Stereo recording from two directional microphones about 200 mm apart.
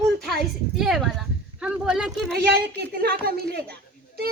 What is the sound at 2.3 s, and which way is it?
A child's voice, 55° right (ahead or behind).